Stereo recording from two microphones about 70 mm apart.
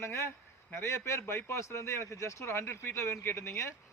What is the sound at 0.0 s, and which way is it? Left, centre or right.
Speech, left.